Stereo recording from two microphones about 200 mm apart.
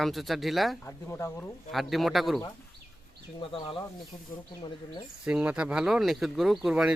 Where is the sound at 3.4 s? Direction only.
25° left (ahead or behind).